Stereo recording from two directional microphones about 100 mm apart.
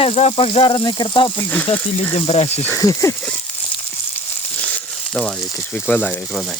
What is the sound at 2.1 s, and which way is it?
Speech, 85° left.